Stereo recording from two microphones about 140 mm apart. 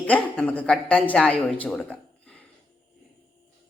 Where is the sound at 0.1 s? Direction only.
10° left (ahead or behind).